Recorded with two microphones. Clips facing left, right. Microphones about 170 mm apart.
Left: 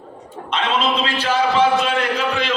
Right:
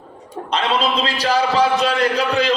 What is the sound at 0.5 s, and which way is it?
A man's voice, 35° right (ahead or behind).